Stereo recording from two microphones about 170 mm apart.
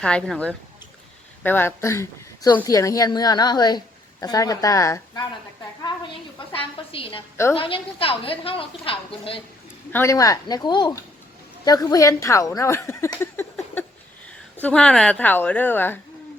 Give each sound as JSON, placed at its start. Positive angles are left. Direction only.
{"t": 0.0, "sound": "a woman's voice", "side_deg": 5}
{"t": 6.5, "sound": "a woman's voice", "side_deg": 30}
{"t": 9.9, "sound": "a woman's voice", "side_deg": 15}